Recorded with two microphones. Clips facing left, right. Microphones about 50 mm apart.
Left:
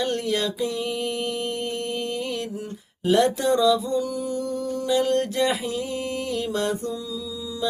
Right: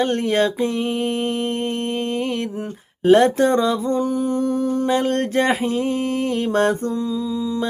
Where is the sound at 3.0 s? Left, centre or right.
Right.